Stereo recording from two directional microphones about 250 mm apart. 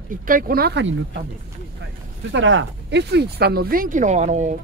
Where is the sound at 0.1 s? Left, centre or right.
Right.